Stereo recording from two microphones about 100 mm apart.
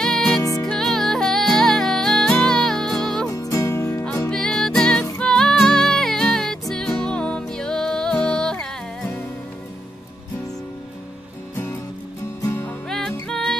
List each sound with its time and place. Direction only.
0.0 s music: 5° left (ahead or behind)
3.3 s music: 35° left (ahead or behind)
4.3 s music: 5° left (ahead or behind)
12.4 s music: 20° left (ahead or behind)
12.8 s music: 5° left (ahead or behind)